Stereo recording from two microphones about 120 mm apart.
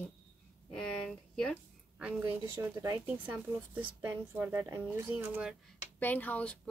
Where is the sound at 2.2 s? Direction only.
20° right (ahead or behind).